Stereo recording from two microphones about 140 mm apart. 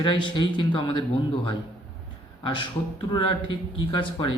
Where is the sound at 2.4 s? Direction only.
40° left (ahead or behind).